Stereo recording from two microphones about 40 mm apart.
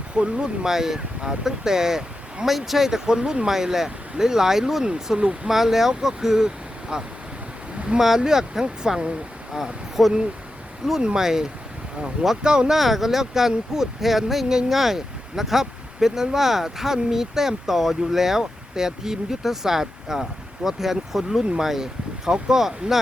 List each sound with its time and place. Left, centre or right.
0.2 s speech: right
0.6 s speech: centre
5.5 s speech: centre
11.0 s speech: centre
12.7 s speech: centre